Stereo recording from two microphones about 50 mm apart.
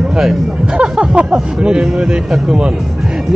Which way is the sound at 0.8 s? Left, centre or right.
Centre.